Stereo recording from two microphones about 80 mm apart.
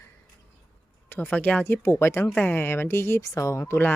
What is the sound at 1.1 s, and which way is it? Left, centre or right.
Speech, left.